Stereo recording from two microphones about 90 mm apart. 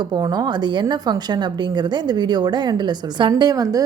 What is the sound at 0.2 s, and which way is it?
A woman's voice, 50° right (ahead or behind).